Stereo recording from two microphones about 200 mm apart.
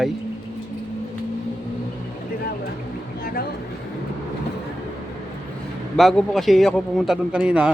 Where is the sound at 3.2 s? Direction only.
50° left (ahead or behind).